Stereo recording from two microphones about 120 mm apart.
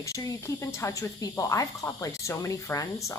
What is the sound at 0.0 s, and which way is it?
Speech, 30° left (ahead or behind).